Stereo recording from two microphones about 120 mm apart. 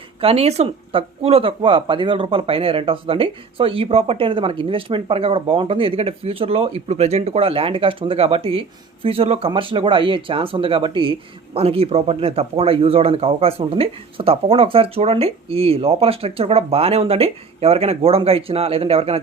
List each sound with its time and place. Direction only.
0.2 s speech: 55° right (ahead or behind)